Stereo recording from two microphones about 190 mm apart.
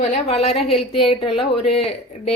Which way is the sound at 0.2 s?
30° left (ahead or behind).